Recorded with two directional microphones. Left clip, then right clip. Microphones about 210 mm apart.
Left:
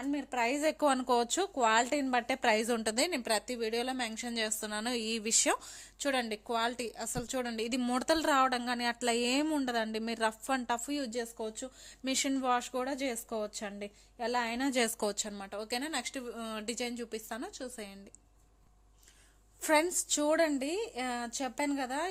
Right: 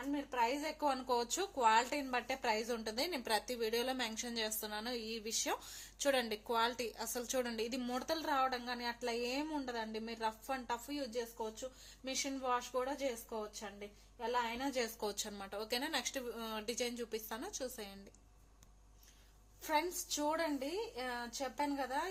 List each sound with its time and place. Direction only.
0.1 s a woman's voice: 50° left (ahead or behind)
3.2 s a woman's voice: 30° left (ahead or behind)
5.6 s a woman's voice: 25° left (ahead or behind); by 14.9 s 50° left (ahead or behind)
15.0 s speech: 30° left (ahead or behind)
19.6 s a woman's voice: 45° left (ahead or behind)